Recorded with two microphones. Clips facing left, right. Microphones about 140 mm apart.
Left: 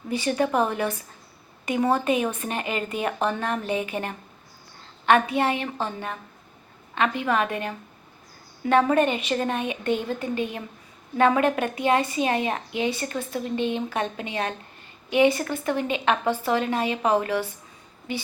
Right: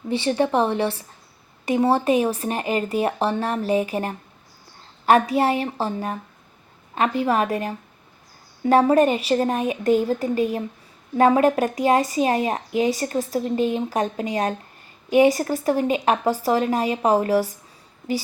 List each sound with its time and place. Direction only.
0.1 s speech: 30° right (ahead or behind)